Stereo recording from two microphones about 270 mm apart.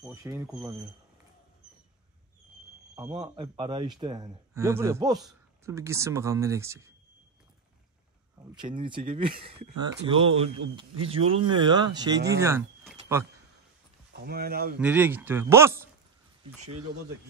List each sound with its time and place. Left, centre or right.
0.0 s a man's voice: centre
3.0 s a man's voice: centre
8.5 s a man's voice: centre
14.2 s speech: right
14.8 s a man's voice: centre